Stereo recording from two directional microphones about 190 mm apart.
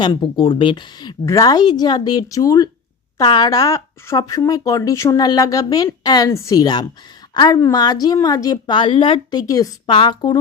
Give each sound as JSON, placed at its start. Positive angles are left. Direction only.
{"t": 0.0, "sound": "speech", "side_deg": 25}